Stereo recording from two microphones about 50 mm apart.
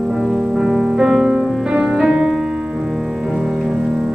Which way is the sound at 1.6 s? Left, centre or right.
Right.